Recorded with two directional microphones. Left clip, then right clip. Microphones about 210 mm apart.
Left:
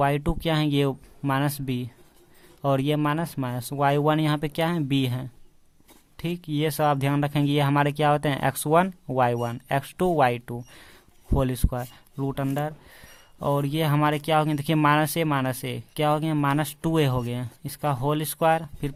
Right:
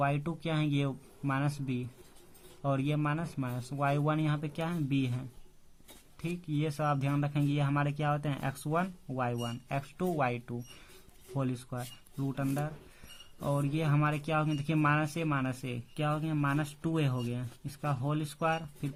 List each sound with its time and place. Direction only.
0.0 s speech: 35° left (ahead or behind)